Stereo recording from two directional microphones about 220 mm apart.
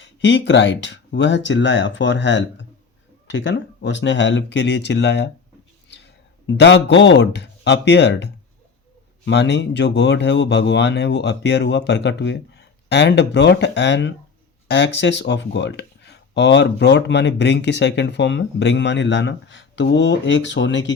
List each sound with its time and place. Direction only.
0.0 s speech: 55° left (ahead or behind)
5.9 s a sound: 50° left (ahead or behind)
6.6 s speech: 50° left (ahead or behind)